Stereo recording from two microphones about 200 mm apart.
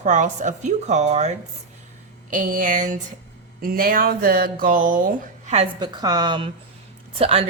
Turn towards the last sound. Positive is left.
turn(degrees=-30)  # may be behind; listen again after turning